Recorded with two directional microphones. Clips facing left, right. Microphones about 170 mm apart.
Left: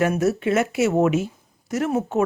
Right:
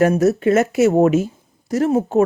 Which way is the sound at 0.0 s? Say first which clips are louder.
Right 6 dB; 40° right (ahead or behind).